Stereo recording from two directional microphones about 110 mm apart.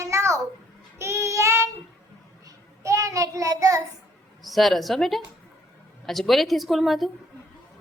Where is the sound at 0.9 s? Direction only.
25° right (ahead or behind).